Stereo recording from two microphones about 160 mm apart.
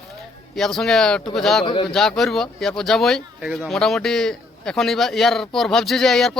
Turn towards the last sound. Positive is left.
turn(degrees=0)  # may be behind; listen again after turning